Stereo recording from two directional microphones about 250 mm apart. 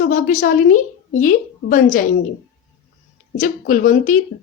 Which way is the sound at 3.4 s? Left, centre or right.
Left.